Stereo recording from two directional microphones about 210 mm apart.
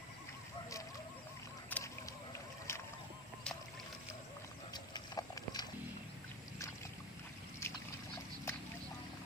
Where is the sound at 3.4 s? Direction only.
5° left (ahead or behind).